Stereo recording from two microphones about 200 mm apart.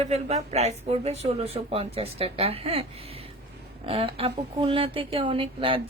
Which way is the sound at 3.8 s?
30° right (ahead or behind).